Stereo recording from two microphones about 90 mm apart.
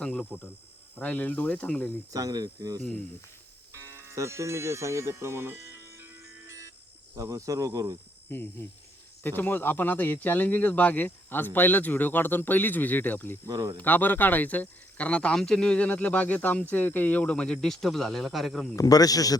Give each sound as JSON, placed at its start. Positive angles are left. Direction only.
{"t": 0.0, "sound": "cricket", "side_deg": 10}
{"t": 0.9, "sound": "speech", "side_deg": 15}
{"t": 2.1, "sound": "speech", "side_deg": -45}
{"t": 7.2, "sound": "speech", "side_deg": -40}
{"t": 8.3, "sound": "speech", "side_deg": 25}
{"t": 13.5, "sound": "speech", "side_deg": -40}
{"t": 13.7, "sound": "speech", "side_deg": 20}
{"t": 18.8, "sound": "a man's voice", "side_deg": 45}